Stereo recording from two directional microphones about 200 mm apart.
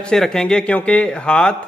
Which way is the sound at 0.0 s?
5° left (ahead or behind).